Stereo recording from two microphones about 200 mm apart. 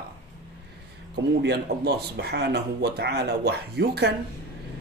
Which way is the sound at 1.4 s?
55° right (ahead or behind).